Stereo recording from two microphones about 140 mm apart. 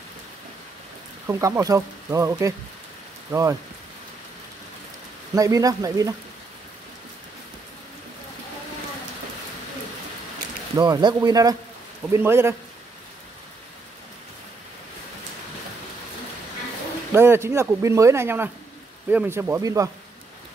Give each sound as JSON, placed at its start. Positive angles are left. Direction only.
{"t": 1.2, "sound": "speech", "side_deg": -20}
{"t": 5.3, "sound": "speech", "side_deg": -25}
{"t": 10.8, "sound": "speech", "side_deg": -30}
{"t": 17.1, "sound": "speech", "side_deg": -15}